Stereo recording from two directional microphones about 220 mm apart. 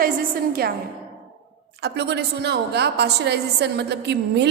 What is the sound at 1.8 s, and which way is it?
A woman's voice, 50° right (ahead or behind).